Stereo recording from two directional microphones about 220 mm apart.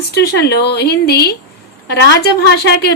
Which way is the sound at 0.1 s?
50° left (ahead or behind).